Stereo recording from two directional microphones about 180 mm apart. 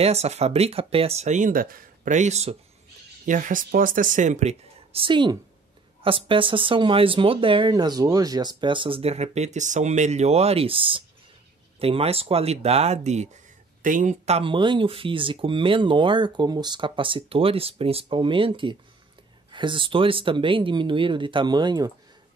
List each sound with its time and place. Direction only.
0.0 s speech: 35° right (ahead or behind)